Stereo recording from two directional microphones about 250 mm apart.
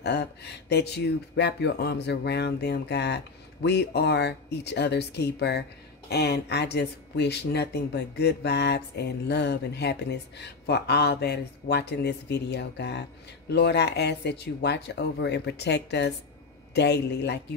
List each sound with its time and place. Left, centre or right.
0.0 s speech: left